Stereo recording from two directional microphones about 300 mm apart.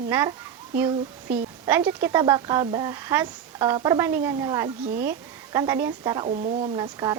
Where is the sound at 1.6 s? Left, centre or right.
Centre.